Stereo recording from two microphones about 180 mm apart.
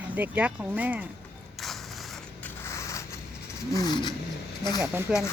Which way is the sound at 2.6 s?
15° left (ahead or behind).